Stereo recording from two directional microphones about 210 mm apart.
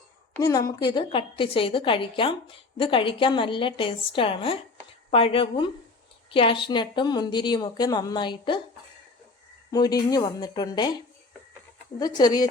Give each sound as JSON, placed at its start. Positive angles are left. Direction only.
{"t": 0.3, "sound": "a woman's voice", "side_deg": 15}
{"t": 9.7, "sound": "a woman's voice", "side_deg": 20}
{"t": 11.9, "sound": "a woman's voice", "side_deg": 20}